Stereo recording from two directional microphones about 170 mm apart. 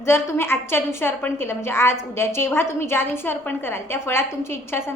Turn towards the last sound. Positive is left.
turn(degrees=15)  # may be behind; listen again after turning